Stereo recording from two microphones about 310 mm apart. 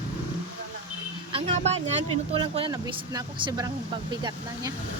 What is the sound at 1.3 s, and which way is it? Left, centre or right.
Speech, centre.